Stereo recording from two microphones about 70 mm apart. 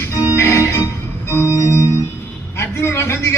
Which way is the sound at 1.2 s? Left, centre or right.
Left.